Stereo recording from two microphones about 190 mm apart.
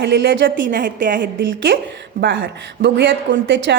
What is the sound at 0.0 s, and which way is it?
Speech, 65° right (ahead or behind).